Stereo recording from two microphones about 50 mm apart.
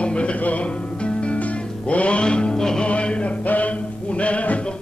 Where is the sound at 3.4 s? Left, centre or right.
Left.